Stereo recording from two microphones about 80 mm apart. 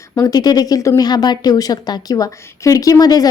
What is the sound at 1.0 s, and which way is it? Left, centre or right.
A woman's voice, left.